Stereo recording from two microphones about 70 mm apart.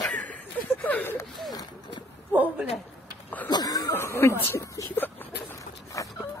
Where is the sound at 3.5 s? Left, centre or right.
Left.